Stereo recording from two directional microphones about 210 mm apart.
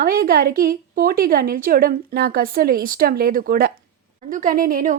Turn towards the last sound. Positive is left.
turn(degrees=-40)  # may be behind; listen again after turning